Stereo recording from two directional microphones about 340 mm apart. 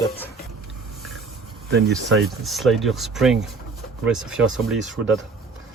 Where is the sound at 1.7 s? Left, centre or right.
Right.